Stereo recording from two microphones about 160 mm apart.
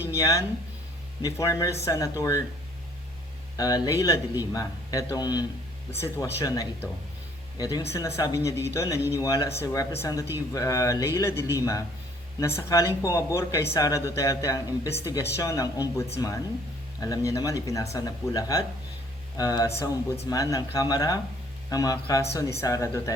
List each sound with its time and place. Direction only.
0.1 s speech: 20° left (ahead or behind)
3.6 s speech: 25° left (ahead or behind)